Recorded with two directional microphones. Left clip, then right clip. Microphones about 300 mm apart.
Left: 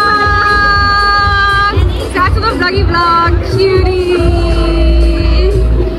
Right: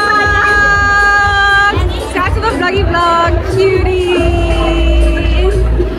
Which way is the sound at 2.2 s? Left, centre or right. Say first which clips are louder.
Left 2 dB; centre.